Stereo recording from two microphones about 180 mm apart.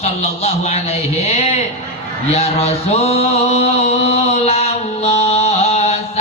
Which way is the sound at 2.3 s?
35° left (ahead or behind).